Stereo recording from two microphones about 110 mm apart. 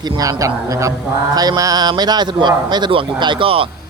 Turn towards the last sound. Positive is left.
turn(degrees=-55)  # may be behind; listen again after turning